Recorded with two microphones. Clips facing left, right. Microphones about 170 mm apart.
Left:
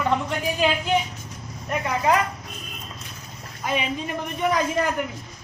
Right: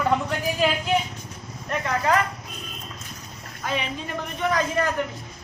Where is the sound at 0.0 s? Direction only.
Centre (ahead or behind).